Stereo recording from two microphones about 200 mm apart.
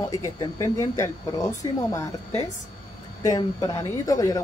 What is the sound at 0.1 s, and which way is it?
Speech, 15° left (ahead or behind).